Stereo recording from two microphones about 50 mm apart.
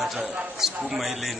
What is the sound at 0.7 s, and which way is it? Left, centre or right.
Speech, right.